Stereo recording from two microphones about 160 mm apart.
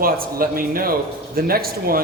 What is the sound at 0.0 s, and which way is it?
Speech, 65° right (ahead or behind).